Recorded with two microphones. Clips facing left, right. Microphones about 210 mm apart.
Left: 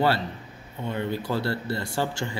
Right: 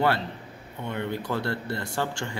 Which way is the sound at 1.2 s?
5° left (ahead or behind).